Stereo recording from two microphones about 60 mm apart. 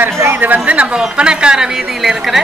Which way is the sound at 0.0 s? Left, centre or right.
Right.